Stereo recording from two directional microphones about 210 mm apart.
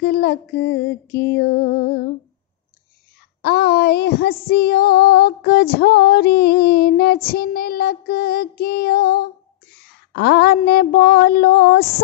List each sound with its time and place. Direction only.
0.0 s female singing: 50° left (ahead or behind)
3.4 s female singing: 50° left (ahead or behind)